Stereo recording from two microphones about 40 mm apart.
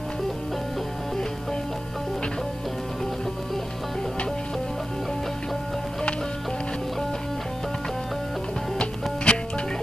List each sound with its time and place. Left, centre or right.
8.7 s music: left